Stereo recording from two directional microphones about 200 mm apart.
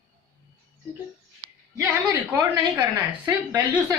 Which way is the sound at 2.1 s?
15° right (ahead or behind).